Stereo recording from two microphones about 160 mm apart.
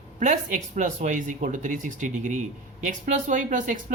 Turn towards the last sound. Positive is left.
turn(degrees=-50)  # may be behind; listen again after turning